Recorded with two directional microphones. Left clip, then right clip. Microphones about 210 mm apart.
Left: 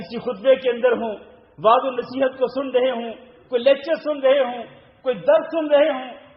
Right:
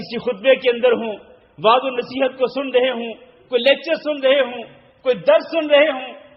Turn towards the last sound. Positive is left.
turn(degrees=-30)  # may be behind; listen again after turning